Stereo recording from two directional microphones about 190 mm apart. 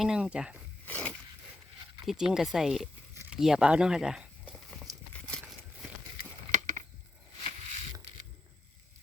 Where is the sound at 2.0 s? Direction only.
5° right (ahead or behind).